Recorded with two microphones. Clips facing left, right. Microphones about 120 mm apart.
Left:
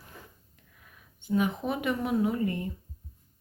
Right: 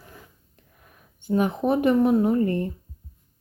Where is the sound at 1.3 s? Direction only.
40° right (ahead or behind).